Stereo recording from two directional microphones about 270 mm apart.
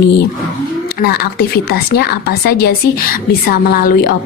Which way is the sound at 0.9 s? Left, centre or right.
Left.